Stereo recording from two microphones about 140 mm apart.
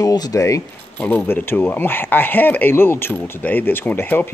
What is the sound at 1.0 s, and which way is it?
Speech, 10° left (ahead or behind).